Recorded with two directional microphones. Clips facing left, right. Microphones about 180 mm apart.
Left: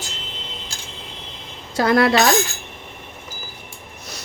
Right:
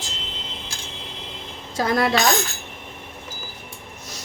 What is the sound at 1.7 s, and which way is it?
Speech, 70° left (ahead or behind).